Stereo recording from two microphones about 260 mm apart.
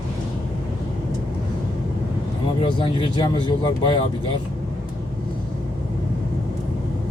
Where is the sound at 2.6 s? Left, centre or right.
Centre.